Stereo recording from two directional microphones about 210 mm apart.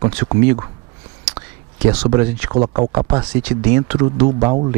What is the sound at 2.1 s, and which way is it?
Speech, 15° right (ahead or behind).